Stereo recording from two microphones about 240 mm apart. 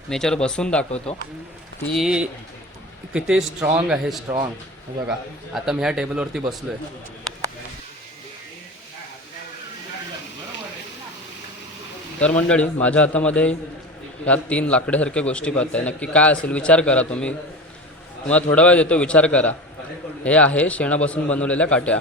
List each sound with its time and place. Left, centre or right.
0.1 s a man's voice: centre
0.9 s speech: left
2.0 s a man's voice: centre
5.5 s a man's voice: centre
12.5 s a man's voice: centre